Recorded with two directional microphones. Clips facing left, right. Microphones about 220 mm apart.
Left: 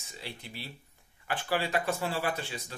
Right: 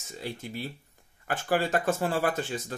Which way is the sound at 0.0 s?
45° right (ahead or behind).